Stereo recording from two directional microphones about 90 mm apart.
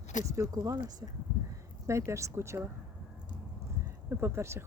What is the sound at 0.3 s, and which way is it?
Speech, 40° right (ahead or behind).